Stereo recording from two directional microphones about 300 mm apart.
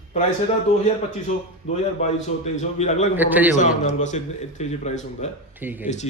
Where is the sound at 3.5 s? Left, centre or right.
Left.